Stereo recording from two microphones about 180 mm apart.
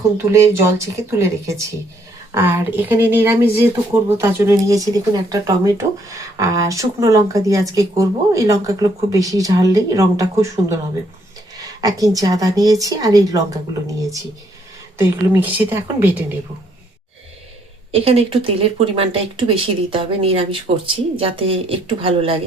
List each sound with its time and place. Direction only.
0.2 s speech: 15° right (ahead or behind)
14.9 s speech: 15° right (ahead or behind)
17.9 s speech: 35° right (ahead or behind)